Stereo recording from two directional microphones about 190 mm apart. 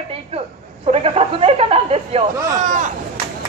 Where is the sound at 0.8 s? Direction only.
30° right (ahead or behind).